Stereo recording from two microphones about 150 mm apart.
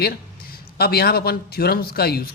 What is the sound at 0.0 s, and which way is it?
A man's voice, 90° left.